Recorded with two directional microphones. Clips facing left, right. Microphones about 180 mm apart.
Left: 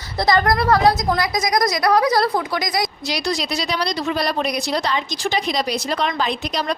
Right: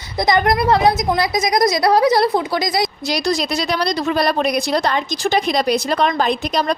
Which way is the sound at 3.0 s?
45° right (ahead or behind).